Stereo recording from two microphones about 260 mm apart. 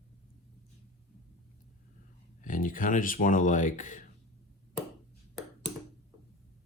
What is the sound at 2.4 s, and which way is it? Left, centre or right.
Speech, left.